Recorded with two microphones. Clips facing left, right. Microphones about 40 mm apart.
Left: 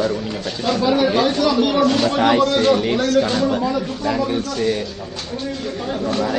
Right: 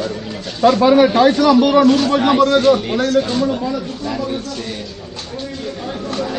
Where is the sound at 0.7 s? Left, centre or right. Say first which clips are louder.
Right 7 dB; right.